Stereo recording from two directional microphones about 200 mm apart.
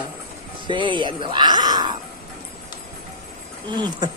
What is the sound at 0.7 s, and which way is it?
Speech, 25° right (ahead or behind).